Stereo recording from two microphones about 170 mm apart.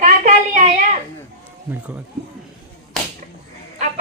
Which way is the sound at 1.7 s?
10° right (ahead or behind).